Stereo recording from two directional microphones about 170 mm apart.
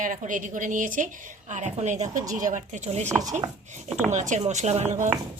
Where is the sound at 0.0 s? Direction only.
50° right (ahead or behind).